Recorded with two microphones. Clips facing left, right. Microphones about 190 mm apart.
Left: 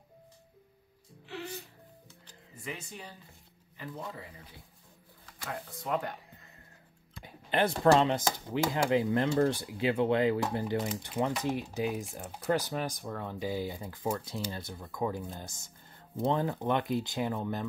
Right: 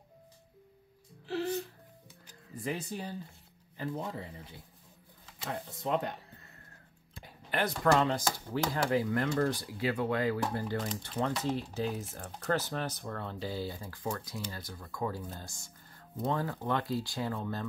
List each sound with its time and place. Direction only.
1.2 s music: 35° right (ahead or behind)
2.5 s speech: 35° right (ahead or behind)
7.5 s speech: 25° left (ahead or behind)